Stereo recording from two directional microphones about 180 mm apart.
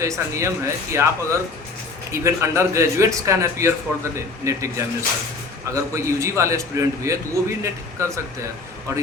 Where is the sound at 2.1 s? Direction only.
15° right (ahead or behind).